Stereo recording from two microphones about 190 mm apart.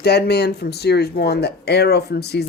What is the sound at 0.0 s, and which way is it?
Speech, 60° left (ahead or behind).